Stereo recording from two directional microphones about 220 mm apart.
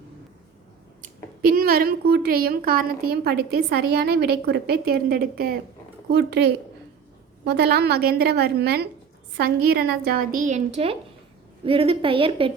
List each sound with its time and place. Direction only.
1.0 s a woman's voice: 40° right (ahead or behind); by 12.5 s 25° right (ahead or behind)